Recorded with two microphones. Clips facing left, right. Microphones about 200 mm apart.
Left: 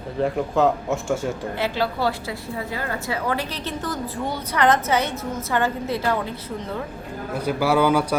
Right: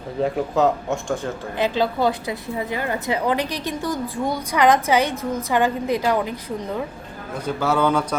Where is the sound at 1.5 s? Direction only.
20° right (ahead or behind).